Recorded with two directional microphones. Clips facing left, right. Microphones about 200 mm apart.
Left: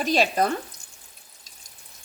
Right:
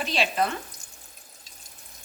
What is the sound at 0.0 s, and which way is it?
Frying, 45° left (ahead or behind).